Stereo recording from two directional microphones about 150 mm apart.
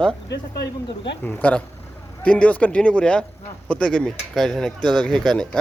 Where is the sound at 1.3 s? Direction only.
10° left (ahead or behind).